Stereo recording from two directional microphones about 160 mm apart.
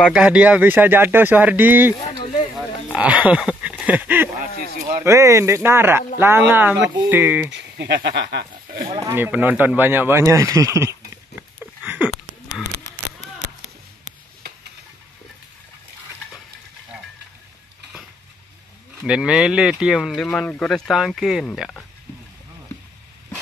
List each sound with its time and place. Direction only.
0.0 s speech: 5° right (ahead or behind)
7.5 s speech: 90° right
9.0 s speech: 15° right (ahead or behind)
11.6 s a sound: 10° right (ahead or behind)
19.0 s speech: 5° right (ahead or behind)